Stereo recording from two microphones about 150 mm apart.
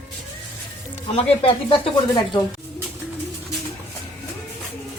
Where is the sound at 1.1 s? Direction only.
40° left (ahead or behind).